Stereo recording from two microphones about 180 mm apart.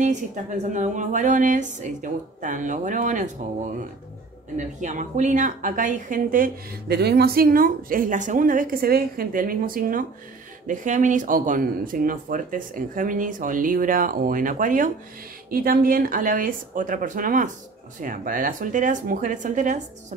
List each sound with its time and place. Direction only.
0.0 s speech: 40° right (ahead or behind)
4.6 s speech: 45° right (ahead or behind)